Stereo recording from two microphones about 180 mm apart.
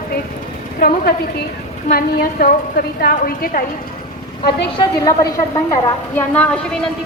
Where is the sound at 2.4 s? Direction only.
55° left (ahead or behind).